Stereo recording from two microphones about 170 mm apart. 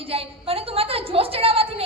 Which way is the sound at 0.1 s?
35° right (ahead or behind).